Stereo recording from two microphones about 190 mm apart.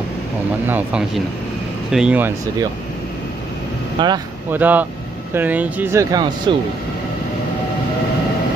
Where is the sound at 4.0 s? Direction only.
25° right (ahead or behind).